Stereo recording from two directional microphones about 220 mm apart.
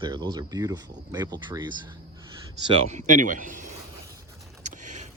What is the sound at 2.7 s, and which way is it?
Speech, 35° right (ahead or behind).